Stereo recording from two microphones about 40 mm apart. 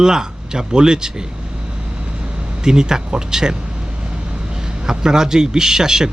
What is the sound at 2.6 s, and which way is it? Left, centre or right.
Speech, centre.